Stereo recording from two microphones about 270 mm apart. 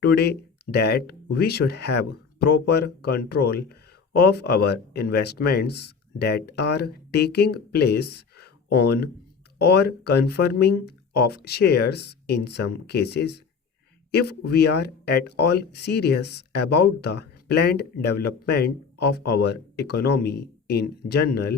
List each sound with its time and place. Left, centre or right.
0.1 s speech: left